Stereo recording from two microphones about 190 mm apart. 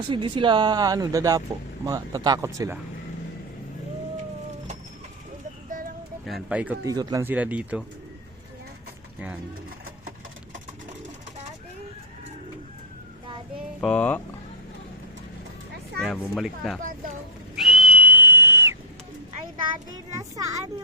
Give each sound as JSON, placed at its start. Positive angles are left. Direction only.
{"t": 0.1, "sound": "speech", "side_deg": -25}
{"t": 6.2, "sound": "speech", "side_deg": -5}
{"t": 6.8, "sound": "speech", "side_deg": -20}
{"t": 13.8, "sound": "speech", "side_deg": 5}
{"t": 16.0, "sound": "speech", "side_deg": 0}
{"t": 17.6, "sound": "whistle", "side_deg": -5}
{"t": 20.1, "sound": "speech", "side_deg": -20}